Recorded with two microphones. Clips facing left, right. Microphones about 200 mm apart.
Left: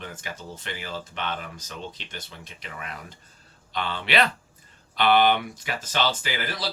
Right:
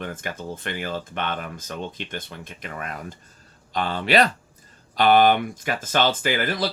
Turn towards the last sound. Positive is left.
turn(degrees=-50)  # may be behind; listen again after turning